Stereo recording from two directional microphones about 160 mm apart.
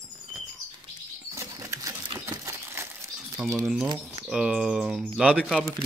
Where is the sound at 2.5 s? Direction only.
15° right (ahead or behind).